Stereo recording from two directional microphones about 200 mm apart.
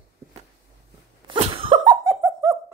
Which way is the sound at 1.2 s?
25° right (ahead or behind).